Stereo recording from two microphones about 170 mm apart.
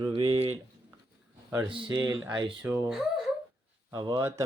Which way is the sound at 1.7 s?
25° right (ahead or behind).